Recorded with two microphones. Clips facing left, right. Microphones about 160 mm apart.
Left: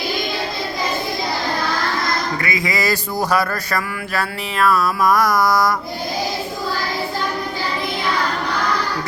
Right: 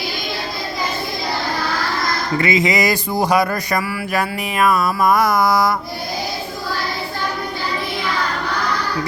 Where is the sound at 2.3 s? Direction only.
25° right (ahead or behind).